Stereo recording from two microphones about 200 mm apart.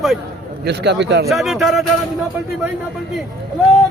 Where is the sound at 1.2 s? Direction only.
Centre (ahead or behind).